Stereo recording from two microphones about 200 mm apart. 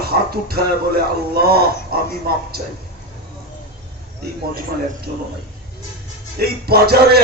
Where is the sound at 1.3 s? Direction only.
50° right (ahead or behind).